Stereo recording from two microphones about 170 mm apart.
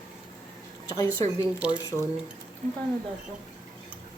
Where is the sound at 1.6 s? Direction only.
5° right (ahead or behind).